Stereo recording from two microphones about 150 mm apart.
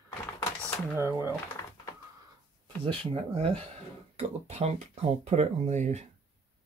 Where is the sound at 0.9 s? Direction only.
15° right (ahead or behind).